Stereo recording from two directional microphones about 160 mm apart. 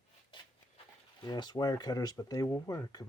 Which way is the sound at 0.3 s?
30° left (ahead or behind).